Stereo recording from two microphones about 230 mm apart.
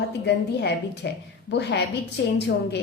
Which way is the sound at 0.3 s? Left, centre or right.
Left.